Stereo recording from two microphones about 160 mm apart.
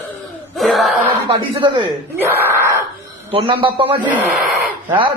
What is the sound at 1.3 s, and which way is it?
Speech, 30° right (ahead or behind).